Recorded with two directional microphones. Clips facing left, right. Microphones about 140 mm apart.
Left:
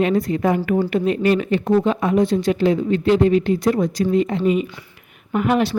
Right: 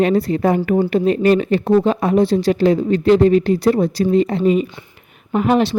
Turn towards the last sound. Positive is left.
turn(degrees=-30)  # may be behind; listen again after turning